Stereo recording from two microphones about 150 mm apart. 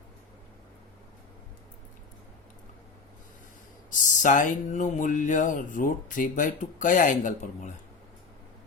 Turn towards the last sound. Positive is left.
turn(degrees=60)  # may be behind; listen again after turning